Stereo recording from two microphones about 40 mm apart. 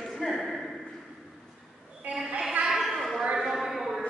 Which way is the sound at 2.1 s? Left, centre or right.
Right.